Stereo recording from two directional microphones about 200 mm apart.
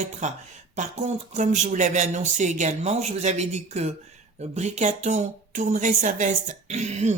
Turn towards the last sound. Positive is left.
turn(degrees=-35)  # may be behind; listen again after turning